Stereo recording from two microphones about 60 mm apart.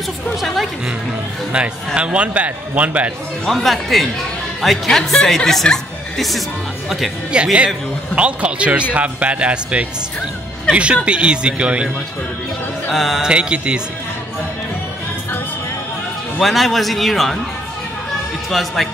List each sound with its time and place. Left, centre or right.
0.4 s speech: centre
2.0 s a man's voice: centre
3.4 s speech: centre
7.3 s a man's voice: centre
12.9 s speech: centre
13.2 s speech: centre
16.3 s speech: centre
18.5 s speech: centre